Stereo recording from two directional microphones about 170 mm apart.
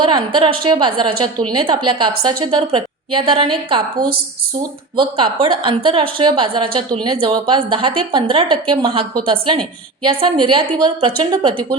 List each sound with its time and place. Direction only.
0.0 s a woman's voice: 30° right (ahead or behind)